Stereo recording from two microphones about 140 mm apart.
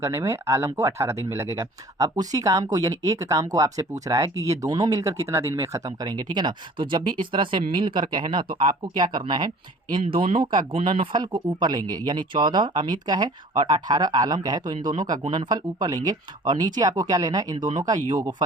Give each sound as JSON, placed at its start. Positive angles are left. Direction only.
{"t": 0.0, "sound": "speech", "side_deg": -20}